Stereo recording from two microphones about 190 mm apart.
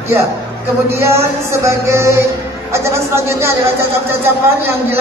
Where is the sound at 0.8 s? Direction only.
15° right (ahead or behind).